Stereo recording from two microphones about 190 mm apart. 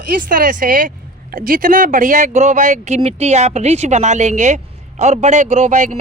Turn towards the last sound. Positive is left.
turn(degrees=-40)  # may be behind; listen again after turning